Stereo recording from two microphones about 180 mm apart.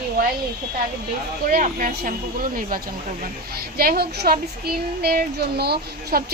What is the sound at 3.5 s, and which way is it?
Child singing, 55° right (ahead or behind).